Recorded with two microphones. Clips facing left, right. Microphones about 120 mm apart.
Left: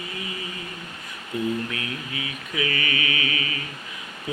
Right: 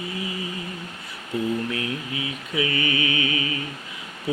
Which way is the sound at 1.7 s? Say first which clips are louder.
Right 3 dB; 25° right (ahead or behind).